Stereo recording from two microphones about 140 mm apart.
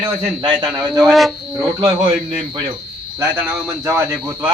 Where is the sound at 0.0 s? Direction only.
35° right (ahead or behind).